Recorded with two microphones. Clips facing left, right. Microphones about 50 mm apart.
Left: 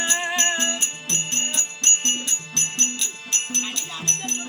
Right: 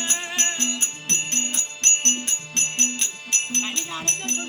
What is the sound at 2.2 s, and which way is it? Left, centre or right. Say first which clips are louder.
Music: even; right.